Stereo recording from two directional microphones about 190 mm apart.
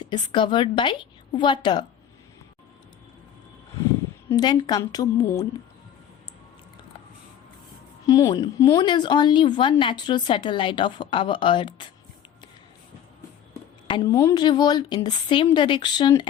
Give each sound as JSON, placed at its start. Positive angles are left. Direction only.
{"t": 0.0, "sound": "speech", "side_deg": 25}
{"t": 4.3, "sound": "speech", "side_deg": 20}
{"t": 8.0, "sound": "speech", "side_deg": 20}
{"t": 13.5, "sound": "speech", "side_deg": 25}